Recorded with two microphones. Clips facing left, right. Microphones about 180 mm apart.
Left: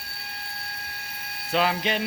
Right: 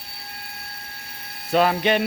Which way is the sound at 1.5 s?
50° right (ahead or behind).